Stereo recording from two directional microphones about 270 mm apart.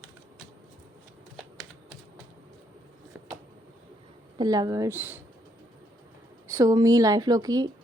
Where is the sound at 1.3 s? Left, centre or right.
Centre.